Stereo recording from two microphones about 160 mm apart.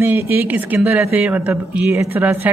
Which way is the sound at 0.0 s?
15° right (ahead or behind).